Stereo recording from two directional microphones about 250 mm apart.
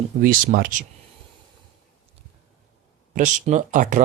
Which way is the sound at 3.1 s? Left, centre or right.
Right.